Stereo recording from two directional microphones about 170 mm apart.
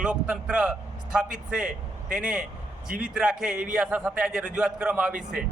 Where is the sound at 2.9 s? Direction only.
60° right (ahead or behind).